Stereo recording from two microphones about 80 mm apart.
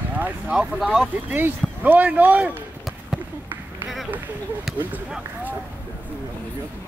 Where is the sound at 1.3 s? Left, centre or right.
Right.